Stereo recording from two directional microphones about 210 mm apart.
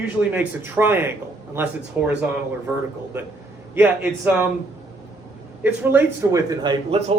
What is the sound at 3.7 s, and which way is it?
Speech, 5° right (ahead or behind).